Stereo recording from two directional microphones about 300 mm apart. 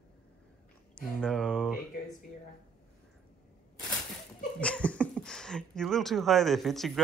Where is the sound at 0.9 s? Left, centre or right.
Centre.